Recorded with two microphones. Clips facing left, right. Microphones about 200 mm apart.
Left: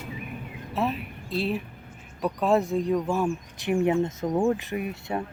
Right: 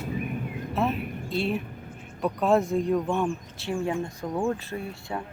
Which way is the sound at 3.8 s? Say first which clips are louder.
Left 7 dB; 20° left (ahead or behind).